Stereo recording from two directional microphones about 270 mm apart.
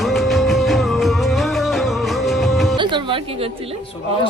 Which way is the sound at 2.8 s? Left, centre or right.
Centre.